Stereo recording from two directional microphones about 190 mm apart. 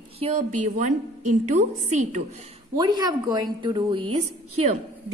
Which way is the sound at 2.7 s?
20° right (ahead or behind).